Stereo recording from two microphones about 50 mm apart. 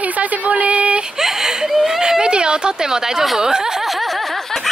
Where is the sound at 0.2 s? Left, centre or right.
Right.